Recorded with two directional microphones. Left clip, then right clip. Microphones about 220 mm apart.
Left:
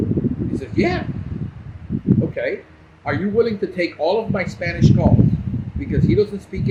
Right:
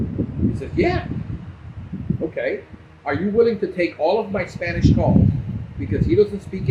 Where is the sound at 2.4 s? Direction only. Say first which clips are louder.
Even; 5° left (ahead or behind).